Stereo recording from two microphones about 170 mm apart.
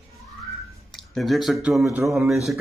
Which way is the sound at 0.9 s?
Centre (ahead or behind).